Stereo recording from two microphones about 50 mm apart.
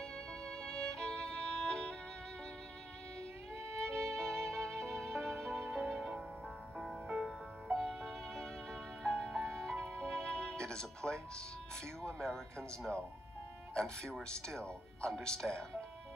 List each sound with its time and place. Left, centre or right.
0.0 s music: centre
3.8 s violin: centre
5.1 s music: centre
12.0 s speech: centre
14.2 s speech: centre